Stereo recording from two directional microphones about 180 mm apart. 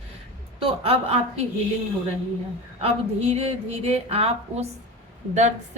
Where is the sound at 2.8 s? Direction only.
35° right (ahead or behind).